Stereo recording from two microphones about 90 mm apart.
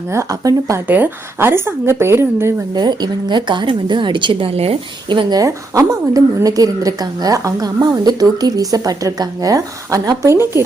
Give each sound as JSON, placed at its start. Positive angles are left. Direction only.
{"t": 0.1, "sound": "speech", "side_deg": -35}
{"t": 0.9, "sound": "a woman's voice", "side_deg": -20}
{"t": 2.7, "sound": "a woman's voice", "side_deg": -50}
{"t": 5.4, "sound": "speech", "side_deg": -40}